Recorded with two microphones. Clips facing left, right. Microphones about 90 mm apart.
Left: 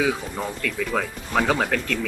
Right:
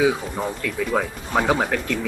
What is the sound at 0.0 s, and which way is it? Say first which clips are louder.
Speech: right 3 dB; 15° right (ahead or behind).